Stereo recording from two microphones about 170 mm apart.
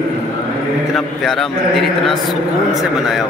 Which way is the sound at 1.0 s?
Centre (ahead or behind).